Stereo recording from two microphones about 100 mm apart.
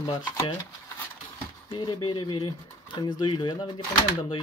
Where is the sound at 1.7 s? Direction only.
45° left (ahead or behind).